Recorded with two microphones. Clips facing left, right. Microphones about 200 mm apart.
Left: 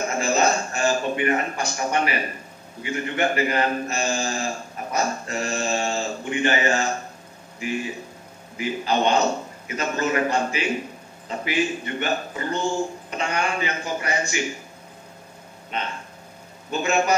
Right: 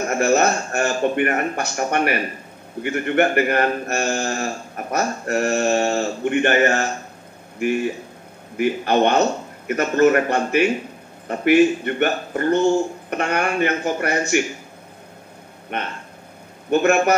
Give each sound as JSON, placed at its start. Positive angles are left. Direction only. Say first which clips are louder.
{"t": 0.1, "sound": "a man's voice", "louder": "right 5 dB", "side_deg": -60}
{"t": 15.7, "sound": "a man's voice", "louder": "right 2 dB", "side_deg": -60}